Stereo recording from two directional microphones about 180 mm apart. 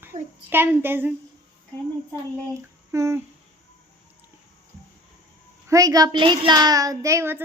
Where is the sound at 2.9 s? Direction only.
15° right (ahead or behind).